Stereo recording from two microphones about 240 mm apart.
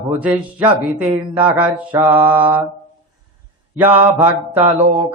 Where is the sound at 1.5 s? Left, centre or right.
Centre.